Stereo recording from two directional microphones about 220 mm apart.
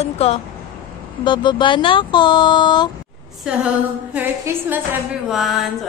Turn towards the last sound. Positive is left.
turn(degrees=0)  # may be behind; listen again after turning